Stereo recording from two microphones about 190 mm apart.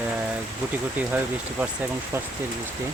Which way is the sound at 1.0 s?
10° right (ahead or behind).